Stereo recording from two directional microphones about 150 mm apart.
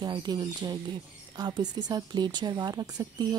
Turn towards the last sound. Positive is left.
turn(degrees=-25)  # may be behind; listen again after turning